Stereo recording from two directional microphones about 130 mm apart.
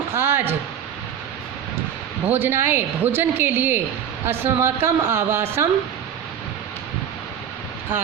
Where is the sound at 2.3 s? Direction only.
15° right (ahead or behind).